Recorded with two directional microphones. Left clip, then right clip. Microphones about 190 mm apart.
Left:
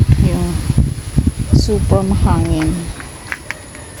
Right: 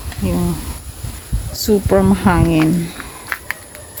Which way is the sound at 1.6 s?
30° right (ahead or behind).